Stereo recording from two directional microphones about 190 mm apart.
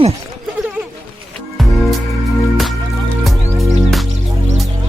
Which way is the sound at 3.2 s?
Centre (ahead or behind).